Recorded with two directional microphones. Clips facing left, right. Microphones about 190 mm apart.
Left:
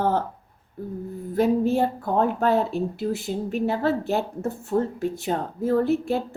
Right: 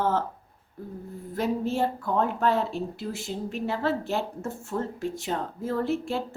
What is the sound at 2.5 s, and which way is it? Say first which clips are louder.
Speech: left 5 dB; 55° left (ahead or behind).